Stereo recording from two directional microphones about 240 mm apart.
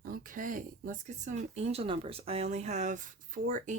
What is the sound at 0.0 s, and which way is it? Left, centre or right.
Speech, right.